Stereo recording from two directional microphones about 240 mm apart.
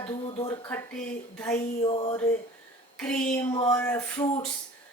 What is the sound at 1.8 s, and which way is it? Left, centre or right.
Speech, left.